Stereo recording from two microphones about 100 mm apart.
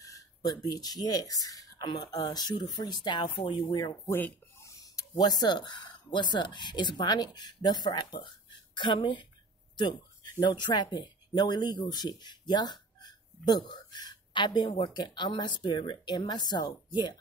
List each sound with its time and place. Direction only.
0.0 s speech: 40° left (ahead or behind)
3.3 s speech: 60° left (ahead or behind)
4.0 s speech: 20° left (ahead or behind)
4.6 s speech: 40° left (ahead or behind)
9.8 s a sound: 45° left (ahead or behind)
10.4 s speech: 50° left (ahead or behind)